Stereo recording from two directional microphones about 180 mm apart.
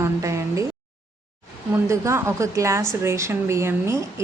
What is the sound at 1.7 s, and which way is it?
A woman's voice, 15° right (ahead or behind).